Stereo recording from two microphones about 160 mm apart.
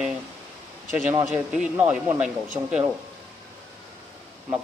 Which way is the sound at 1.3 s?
10° right (ahead or behind).